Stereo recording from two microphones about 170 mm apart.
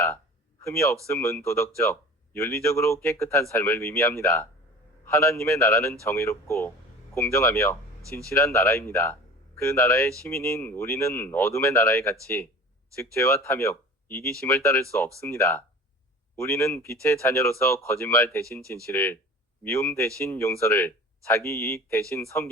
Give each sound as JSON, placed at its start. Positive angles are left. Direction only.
{"t": 0.6, "sound": "speech", "side_deg": 15}